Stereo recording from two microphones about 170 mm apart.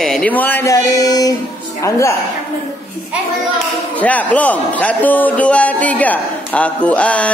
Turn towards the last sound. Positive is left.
turn(degrees=5)  # may be behind; listen again after turning